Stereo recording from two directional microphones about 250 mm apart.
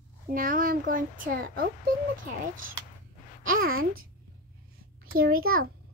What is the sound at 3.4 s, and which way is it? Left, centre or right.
Speech, right.